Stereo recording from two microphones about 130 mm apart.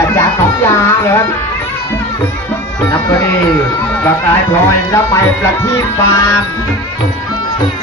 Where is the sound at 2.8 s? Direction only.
20° left (ahead or behind).